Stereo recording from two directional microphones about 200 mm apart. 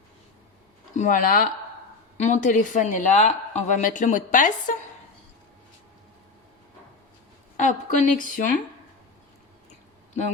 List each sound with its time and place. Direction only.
0.9 s a woman's voice: 40° left (ahead or behind)
7.5 s a woman's voice: 40° left (ahead or behind)